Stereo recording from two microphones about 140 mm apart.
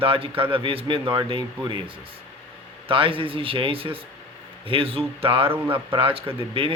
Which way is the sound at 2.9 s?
40° right (ahead or behind).